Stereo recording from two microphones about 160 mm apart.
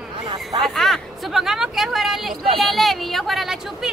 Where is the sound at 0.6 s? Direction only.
Centre (ahead or behind).